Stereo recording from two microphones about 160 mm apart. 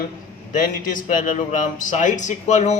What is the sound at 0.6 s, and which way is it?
A man's voice, 55° left (ahead or behind).